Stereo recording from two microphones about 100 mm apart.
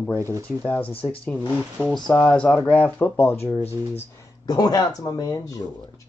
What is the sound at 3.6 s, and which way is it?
Speech, 90° left.